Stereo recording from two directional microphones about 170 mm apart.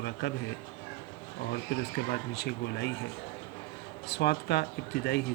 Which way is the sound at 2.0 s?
70° left (ahead or behind).